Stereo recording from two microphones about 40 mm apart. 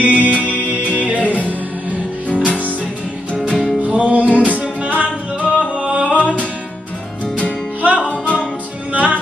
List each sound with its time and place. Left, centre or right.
0.0 s music: right
2.3 s music: left
3.5 s music: centre
3.8 s music: right
7.8 s music: right